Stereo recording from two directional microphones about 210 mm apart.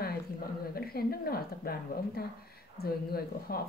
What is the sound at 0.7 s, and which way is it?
Speech, 45° left (ahead or behind).